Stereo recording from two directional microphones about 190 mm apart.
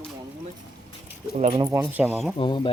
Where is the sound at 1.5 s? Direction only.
15° right (ahead or behind).